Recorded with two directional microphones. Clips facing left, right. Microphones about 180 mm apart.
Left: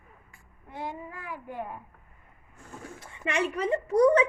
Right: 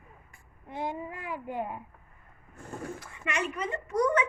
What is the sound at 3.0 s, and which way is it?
A child's voice, 30° left (ahead or behind).